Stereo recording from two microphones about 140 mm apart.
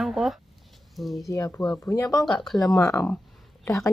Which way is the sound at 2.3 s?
Centre (ahead or behind).